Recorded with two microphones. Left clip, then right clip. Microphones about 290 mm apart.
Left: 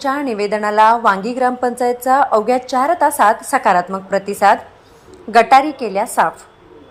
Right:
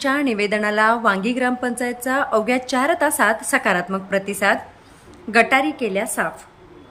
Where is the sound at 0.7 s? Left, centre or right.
Centre.